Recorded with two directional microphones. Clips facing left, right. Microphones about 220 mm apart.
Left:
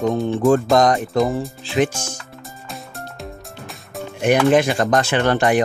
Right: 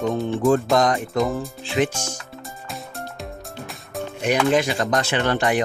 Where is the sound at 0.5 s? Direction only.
45° left (ahead or behind).